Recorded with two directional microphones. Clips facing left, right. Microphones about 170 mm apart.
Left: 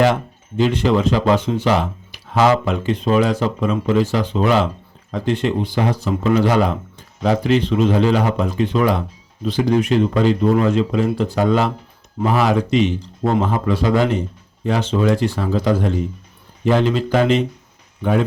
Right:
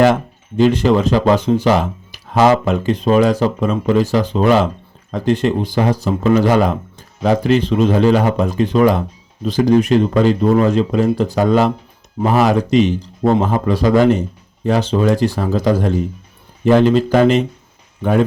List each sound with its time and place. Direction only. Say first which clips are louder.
0.0 s speech: right 3 dB; 45° right (ahead or behind)